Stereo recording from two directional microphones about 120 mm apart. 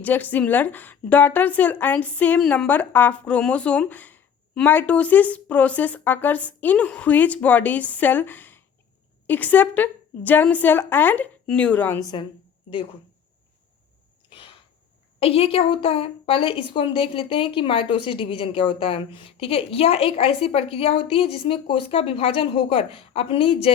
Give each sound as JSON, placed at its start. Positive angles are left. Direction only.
{"t": 0.0, "sound": "speech", "side_deg": 15}
{"t": 11.9, "sound": "a woman's voice", "side_deg": 35}
{"t": 14.3, "sound": "sneeze", "side_deg": 45}
{"t": 15.2, "sound": "a woman's voice", "side_deg": 55}